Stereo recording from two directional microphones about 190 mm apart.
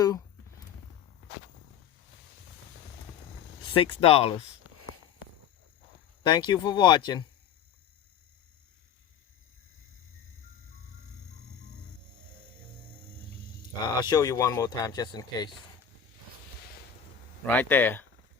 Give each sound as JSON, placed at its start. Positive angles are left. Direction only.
{"t": 3.8, "sound": "speech", "side_deg": 30}
{"t": 6.2, "sound": "speech", "side_deg": 25}
{"t": 13.8, "sound": "speech", "side_deg": 20}
{"t": 17.4, "sound": "speech", "side_deg": 10}